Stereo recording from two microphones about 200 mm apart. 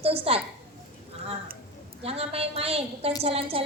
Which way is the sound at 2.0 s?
30° right (ahead or behind).